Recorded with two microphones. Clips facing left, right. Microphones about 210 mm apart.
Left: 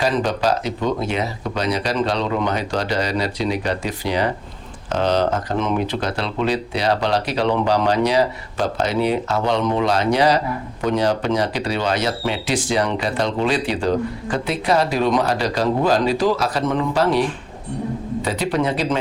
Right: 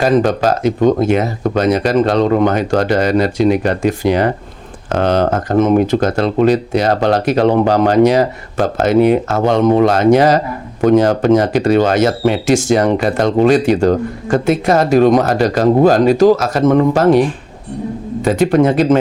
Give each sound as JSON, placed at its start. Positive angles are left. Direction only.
{"t": 0.0, "sound": "speech", "side_deg": -45}